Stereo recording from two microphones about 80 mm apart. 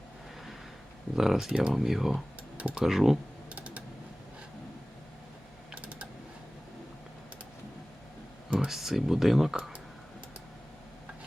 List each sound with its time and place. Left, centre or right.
1.1 s speech: centre
2.1 s computer keyboard: centre
2.8 s speech: centre
3.5 s mechanisms: centre
5.7 s typing: centre
8.5 s speech: centre